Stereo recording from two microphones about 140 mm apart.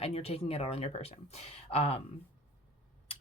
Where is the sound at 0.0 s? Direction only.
50° left (ahead or behind).